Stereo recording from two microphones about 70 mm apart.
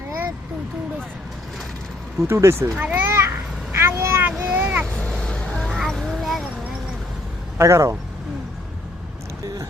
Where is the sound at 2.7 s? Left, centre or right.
Right.